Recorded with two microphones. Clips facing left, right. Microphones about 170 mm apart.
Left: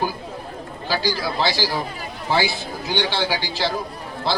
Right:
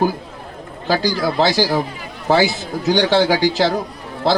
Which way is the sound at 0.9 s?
45° right (ahead or behind).